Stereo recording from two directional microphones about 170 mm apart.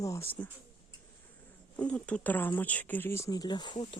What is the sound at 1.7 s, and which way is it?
Speech, 5° left (ahead or behind).